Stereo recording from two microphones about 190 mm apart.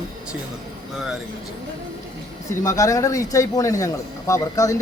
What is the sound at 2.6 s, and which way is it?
Speech, 15° left (ahead or behind).